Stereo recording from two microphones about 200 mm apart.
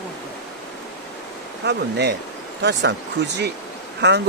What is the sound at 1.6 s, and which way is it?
Speech, 55° right (ahead or behind).